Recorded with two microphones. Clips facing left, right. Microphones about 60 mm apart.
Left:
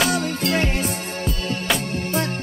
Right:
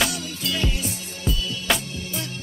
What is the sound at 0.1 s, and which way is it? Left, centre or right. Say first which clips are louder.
Music: left 8 dB; left.